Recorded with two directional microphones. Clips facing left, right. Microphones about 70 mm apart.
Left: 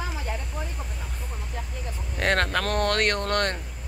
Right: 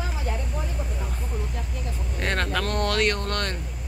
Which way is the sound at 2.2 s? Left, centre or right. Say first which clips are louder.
Left 3 dB; left.